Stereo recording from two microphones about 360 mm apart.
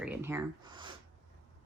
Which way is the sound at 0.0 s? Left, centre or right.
Centre.